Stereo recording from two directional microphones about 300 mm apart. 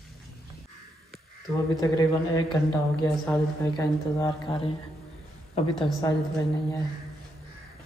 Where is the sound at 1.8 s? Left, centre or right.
Centre.